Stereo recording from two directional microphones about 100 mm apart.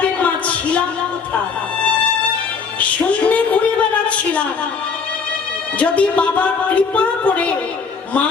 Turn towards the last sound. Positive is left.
turn(degrees=15)  # may be behind; listen again after turning